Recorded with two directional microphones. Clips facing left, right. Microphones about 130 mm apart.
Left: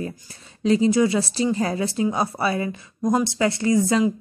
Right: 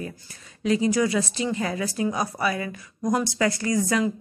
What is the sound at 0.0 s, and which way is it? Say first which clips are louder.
A woman's voice: left 4 dB; 30° left (ahead or behind).